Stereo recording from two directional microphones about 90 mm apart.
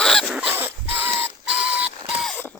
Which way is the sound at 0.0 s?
5° left (ahead or behind).